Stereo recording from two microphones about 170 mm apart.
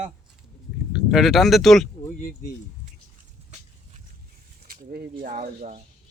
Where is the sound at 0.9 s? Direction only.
Centre (ahead or behind).